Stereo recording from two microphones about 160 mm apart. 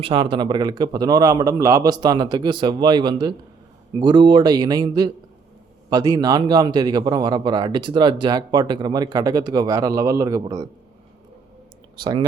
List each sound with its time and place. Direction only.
0.0 s a man's voice: 30° right (ahead or behind)